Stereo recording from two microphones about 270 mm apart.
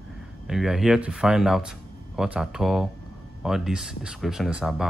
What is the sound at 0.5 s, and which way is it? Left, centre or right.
Speech, centre.